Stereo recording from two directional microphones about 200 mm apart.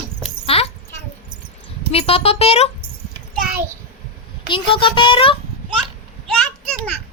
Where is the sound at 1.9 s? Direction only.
30° left (ahead or behind).